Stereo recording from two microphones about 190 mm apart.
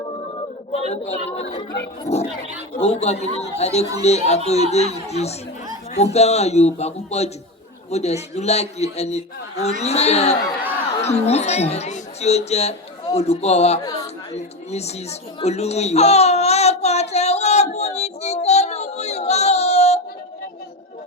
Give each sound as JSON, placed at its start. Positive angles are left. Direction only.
{"t": 0.7, "sound": "a woman's voice", "side_deg": 30}
{"t": 1.4, "sound": "speech", "side_deg": 60}
{"t": 2.1, "sound": "a man's voice", "side_deg": 35}
{"t": 14.7, "sound": "baby cry", "side_deg": 35}